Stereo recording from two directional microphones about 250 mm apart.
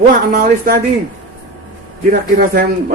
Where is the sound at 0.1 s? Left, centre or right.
Right.